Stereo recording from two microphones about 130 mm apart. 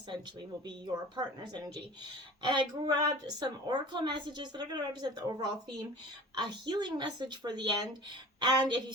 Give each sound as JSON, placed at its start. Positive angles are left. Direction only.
{"t": 0.9, "sound": "a woman's voice", "side_deg": -35}